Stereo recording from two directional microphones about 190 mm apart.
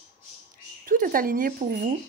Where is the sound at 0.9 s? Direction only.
45° right (ahead or behind).